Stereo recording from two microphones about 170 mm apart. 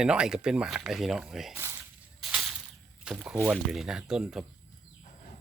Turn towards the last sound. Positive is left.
turn(degrees=-5)  # may be behind; listen again after turning